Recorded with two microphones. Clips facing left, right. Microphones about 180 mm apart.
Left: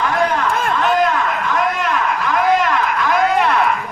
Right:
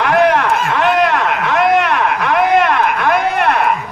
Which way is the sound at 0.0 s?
70° right (ahead or behind).